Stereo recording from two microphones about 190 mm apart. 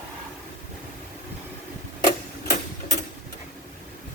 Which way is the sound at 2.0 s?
45° left (ahead or behind).